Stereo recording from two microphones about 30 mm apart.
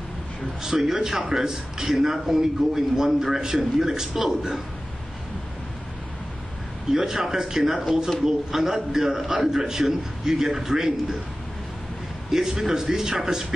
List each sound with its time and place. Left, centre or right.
0.6 s a man's voice: centre
6.9 s a man's voice: centre
12.3 s a man's voice: centre